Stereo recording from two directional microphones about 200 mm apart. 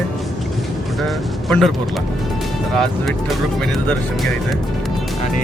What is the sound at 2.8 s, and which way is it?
Speech, centre (ahead or behind).